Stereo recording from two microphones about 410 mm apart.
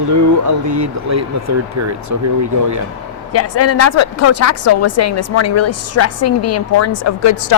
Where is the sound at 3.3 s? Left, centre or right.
Left.